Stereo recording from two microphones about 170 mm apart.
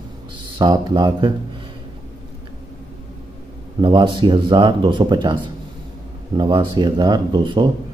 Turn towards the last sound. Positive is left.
turn(degrees=-30)  # may be behind; listen again after turning